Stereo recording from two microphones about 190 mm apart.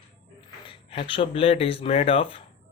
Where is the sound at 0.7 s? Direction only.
25° left (ahead or behind).